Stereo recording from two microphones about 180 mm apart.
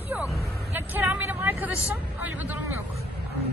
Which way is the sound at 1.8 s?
10° right (ahead or behind).